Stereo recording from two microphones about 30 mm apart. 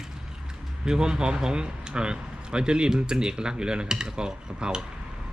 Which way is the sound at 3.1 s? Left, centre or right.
Right.